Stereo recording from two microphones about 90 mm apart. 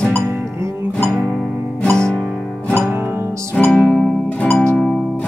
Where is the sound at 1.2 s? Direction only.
5° left (ahead or behind).